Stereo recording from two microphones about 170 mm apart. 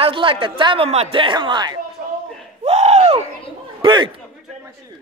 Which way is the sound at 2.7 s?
40° right (ahead or behind).